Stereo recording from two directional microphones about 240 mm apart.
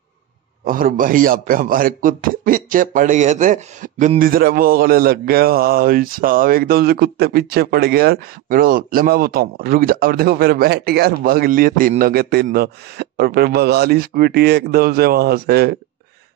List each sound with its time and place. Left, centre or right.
0.7 s a man's voice: right